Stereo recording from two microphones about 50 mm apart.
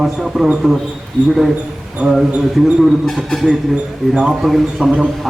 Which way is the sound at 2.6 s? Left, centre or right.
Centre.